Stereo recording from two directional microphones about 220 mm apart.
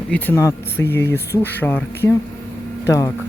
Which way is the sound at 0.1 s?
10° left (ahead or behind).